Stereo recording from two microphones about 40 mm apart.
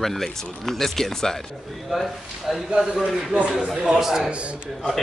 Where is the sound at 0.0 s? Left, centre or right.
Centre.